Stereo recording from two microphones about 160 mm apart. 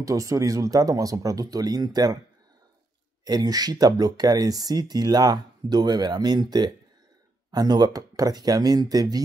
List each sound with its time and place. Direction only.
0.0 s speech: 20° right (ahead or behind)
3.3 s speech: 25° right (ahead or behind)